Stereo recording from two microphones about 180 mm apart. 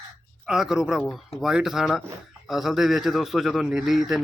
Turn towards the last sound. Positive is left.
turn(degrees=0)  # may be behind; listen again after turning